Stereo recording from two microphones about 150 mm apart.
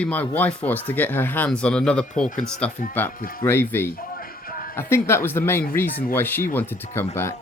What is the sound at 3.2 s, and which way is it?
Speech, 70° left (ahead or behind).